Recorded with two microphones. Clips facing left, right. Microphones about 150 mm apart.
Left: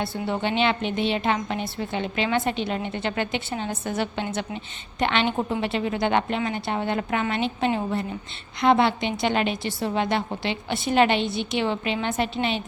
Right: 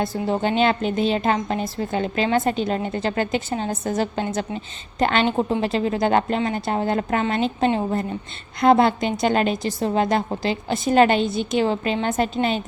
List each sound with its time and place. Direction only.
0.0 s a woman's voice: 40° right (ahead or behind)